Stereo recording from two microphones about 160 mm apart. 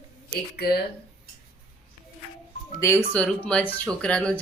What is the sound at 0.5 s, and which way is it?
Speech, 75° left (ahead or behind).